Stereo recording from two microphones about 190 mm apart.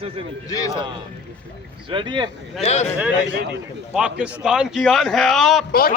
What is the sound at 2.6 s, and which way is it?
Speech, 35° left (ahead or behind).